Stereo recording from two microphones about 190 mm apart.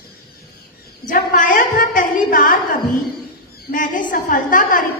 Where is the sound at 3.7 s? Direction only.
45° left (ahead or behind).